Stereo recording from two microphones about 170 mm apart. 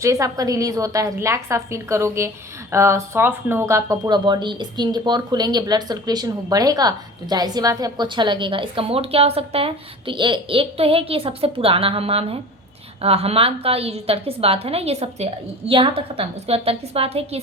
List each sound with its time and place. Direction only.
0.0 s a woman's voice: 20° right (ahead or behind); by 17.4 s 35° right (ahead or behind)